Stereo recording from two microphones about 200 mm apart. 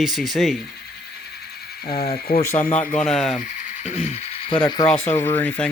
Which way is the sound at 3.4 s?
35° left (ahead or behind).